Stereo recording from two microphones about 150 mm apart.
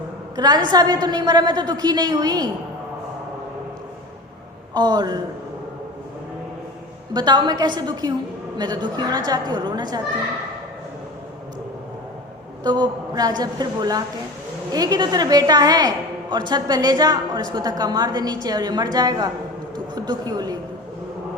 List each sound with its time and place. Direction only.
0.3 s a woman's voice: 25° right (ahead or behind)
4.7 s a woman's voice: 30° right (ahead or behind)
7.1 s a woman's voice: 30° right (ahead or behind)
12.6 s a woman's voice: 30° right (ahead or behind)